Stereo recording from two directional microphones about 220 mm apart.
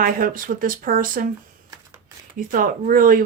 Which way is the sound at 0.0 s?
40° right (ahead or behind).